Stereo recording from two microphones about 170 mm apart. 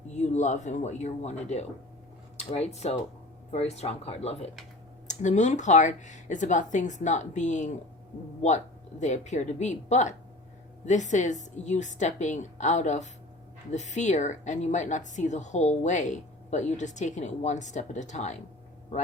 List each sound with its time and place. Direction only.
0.1 s speech: 45° left (ahead or behind)